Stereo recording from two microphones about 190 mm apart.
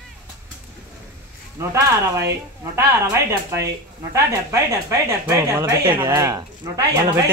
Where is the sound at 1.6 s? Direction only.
15° right (ahead or behind).